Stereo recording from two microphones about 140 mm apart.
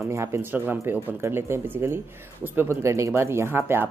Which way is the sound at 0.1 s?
20° right (ahead or behind).